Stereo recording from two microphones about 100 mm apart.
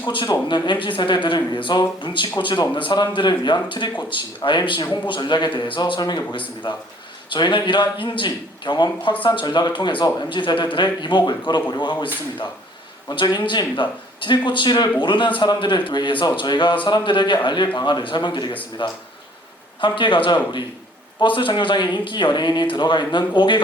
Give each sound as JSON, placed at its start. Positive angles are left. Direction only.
{"t": 0.1, "sound": "speech", "side_deg": 55}
{"t": 13.1, "sound": "speech", "side_deg": 45}